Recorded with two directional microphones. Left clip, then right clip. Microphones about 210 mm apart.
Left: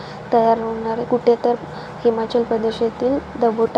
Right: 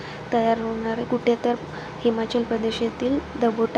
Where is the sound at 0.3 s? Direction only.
5° left (ahead or behind).